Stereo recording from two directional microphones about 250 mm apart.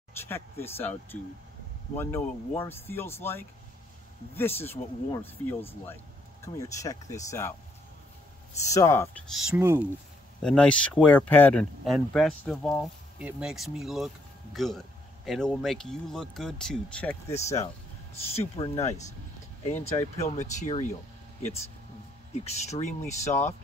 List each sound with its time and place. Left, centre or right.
0.2 s speech: centre
2.0 s speech: centre
4.6 s speech: centre
8.6 s speech: centre
9.3 s speech: centre
10.4 s speech: centre
17.3 s speech: left